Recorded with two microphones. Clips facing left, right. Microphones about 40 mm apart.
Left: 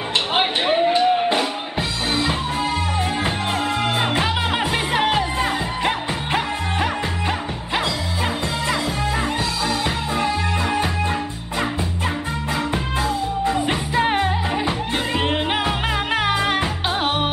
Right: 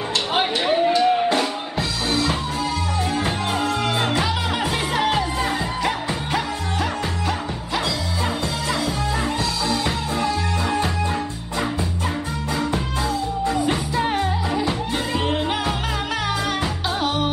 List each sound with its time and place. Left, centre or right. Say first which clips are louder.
0.3 s music: left 1 dB; left
9.7 s music: left 1 dB; left
13.5 s music: right 1 dB; left